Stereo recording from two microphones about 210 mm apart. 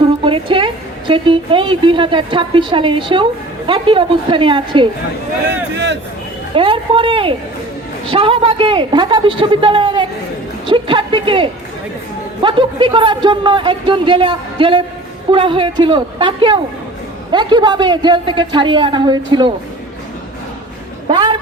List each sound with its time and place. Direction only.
0.0 s a woman's voice: 25° right (ahead or behind)
5.5 s a man's voice: 55° right (ahead or behind)
6.5 s speech: 25° right (ahead or behind)
21.1 s a sound: 20° right (ahead or behind)